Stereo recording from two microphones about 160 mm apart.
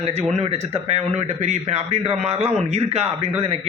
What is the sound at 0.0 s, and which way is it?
A man's voice, 40° right (ahead or behind).